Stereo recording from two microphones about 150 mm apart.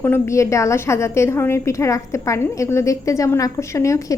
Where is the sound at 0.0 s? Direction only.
15° left (ahead or behind).